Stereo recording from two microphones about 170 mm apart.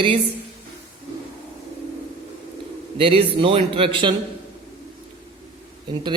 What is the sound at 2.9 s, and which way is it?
A man's voice, 35° right (ahead or behind).